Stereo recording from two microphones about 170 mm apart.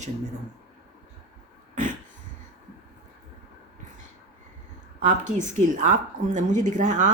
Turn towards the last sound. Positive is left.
turn(degrees=-45)  # may be behind; listen again after turning